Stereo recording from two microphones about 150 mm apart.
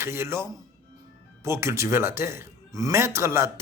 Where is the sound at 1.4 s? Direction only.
20° right (ahead or behind).